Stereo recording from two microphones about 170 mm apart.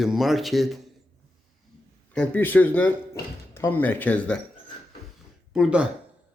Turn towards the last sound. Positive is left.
turn(degrees=-5)  # may be behind; listen again after turning